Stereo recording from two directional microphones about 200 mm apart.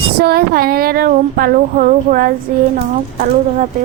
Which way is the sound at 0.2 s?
50° right (ahead or behind).